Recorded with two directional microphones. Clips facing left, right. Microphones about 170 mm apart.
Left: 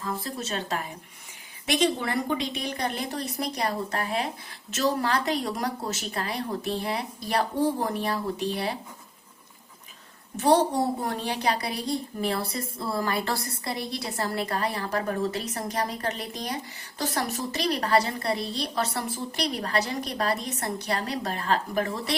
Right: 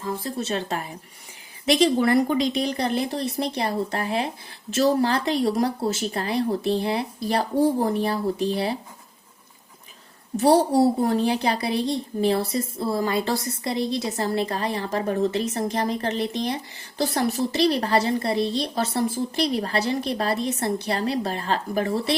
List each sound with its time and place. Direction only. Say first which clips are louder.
0.0 s a woman's voice: right 4 dB; 30° right (ahead or behind)
1.8 s a woman's voice: right 7 dB; 40° right (ahead or behind)
10.3 s a woman's voice: right 4 dB; 35° right (ahead or behind)